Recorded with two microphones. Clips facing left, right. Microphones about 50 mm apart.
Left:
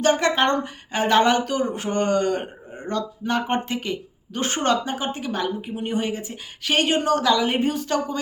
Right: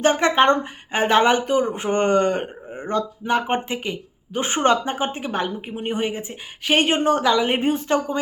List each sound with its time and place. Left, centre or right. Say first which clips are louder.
0.0 s speech: right 3 dB; right